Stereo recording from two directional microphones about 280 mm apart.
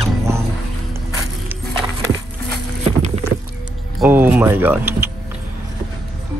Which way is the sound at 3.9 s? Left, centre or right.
Centre.